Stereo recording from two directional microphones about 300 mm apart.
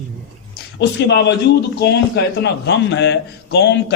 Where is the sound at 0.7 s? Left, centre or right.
Left.